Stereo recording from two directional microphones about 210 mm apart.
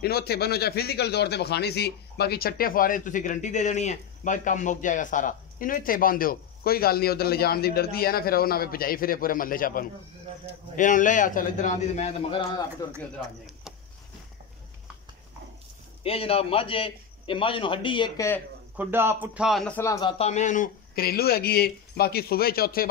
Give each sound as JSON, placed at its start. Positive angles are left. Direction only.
{"t": 0.0, "sound": "a man's voice", "side_deg": 50}
{"t": 16.0, "sound": "a man's voice", "side_deg": 25}
{"t": 18.8, "sound": "speech", "side_deg": -10}